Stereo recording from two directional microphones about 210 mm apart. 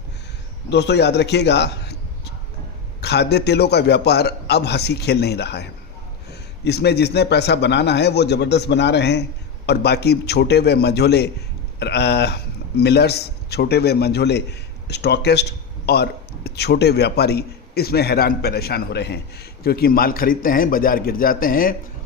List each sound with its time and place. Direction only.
0.7 s a man's voice: 55° left (ahead or behind)
3.0 s a man's voice: 50° left (ahead or behind)
6.7 s a man's voice: 50° left (ahead or behind)